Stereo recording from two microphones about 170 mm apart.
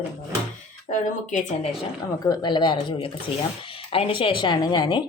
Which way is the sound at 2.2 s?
25° left (ahead or behind).